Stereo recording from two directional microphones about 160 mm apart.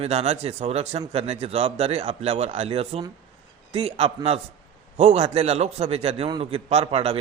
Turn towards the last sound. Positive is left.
turn(degrees=-40)  # may be behind; listen again after turning